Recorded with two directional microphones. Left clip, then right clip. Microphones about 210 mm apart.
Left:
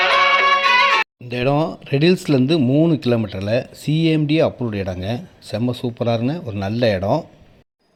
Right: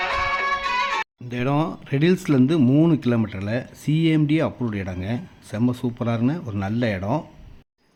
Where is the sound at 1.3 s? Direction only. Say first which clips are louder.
Left 4 dB; 5° left (ahead or behind).